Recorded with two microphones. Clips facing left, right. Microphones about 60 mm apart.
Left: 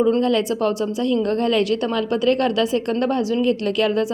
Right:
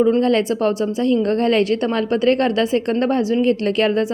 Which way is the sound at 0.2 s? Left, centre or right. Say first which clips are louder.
Right 2 dB; right.